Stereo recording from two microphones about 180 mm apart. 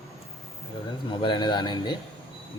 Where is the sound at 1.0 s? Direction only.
25° left (ahead or behind).